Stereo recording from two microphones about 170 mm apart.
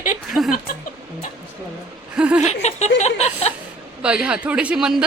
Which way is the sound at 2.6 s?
40° left (ahead or behind).